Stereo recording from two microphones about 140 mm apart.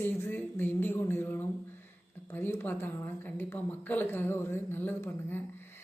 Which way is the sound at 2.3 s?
15° left (ahead or behind).